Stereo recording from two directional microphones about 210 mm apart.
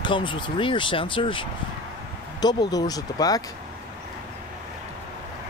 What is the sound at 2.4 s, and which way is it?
Speech, 20° left (ahead or behind).